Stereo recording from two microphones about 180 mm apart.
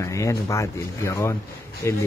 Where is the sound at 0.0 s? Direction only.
15° left (ahead or behind).